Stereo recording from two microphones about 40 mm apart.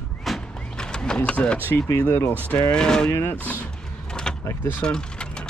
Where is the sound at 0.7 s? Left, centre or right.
Centre.